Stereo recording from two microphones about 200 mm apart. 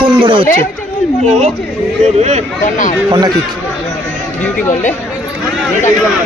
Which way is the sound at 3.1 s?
20° right (ahead or behind).